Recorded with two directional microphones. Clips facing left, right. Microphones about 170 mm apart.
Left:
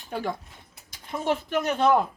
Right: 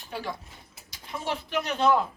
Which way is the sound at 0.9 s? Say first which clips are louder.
Left 6 dB; 50° left (ahead or behind).